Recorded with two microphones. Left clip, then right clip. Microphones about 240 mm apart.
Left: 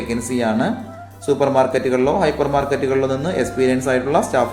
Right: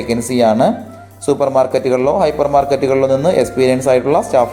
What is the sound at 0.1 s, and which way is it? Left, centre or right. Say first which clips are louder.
Speech: right 8 dB; right.